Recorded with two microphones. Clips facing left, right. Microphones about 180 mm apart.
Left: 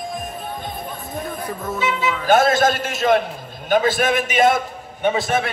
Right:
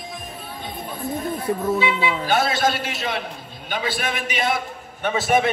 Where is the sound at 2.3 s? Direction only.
45° left (ahead or behind).